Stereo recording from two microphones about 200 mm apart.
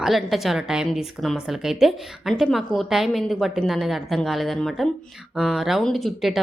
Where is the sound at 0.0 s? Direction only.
Centre (ahead or behind).